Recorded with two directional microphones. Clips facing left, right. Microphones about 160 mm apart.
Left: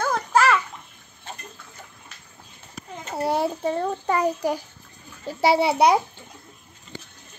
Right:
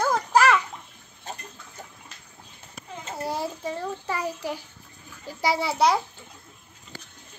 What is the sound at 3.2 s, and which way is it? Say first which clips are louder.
A child's voice: left 7 dB; 65° left (ahead or behind).